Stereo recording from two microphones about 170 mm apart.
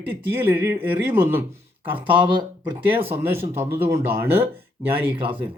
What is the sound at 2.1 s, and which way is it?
Speech, 25° right (ahead or behind).